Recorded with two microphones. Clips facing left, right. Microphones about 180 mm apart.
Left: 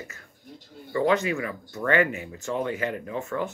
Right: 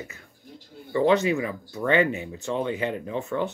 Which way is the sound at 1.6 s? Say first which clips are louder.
Right 2 dB; 10° right (ahead or behind).